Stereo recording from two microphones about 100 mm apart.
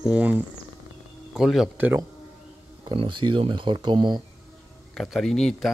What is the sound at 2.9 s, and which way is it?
Speech, 55° right (ahead or behind).